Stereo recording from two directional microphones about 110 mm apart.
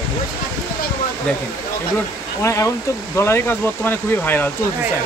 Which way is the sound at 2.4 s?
25° left (ahead or behind).